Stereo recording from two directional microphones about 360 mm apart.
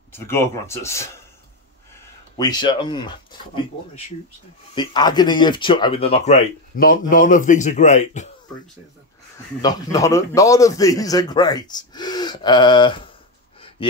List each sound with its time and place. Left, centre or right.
0.1 s speech: centre
2.3 s speech: centre
4.7 s speech: centre
9.6 s speech: centre